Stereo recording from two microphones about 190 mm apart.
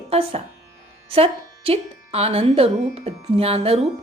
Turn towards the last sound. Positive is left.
turn(degrees=-30)  # may be behind; listen again after turning